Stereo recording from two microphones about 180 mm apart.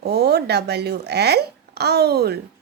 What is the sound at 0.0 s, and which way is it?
A woman's voice, 65° right (ahead or behind).